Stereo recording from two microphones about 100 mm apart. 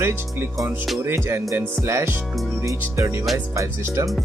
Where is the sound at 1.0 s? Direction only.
25° right (ahead or behind).